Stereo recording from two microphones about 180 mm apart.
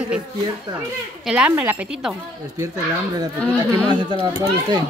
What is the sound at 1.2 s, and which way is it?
Speech, 5° right (ahead or behind).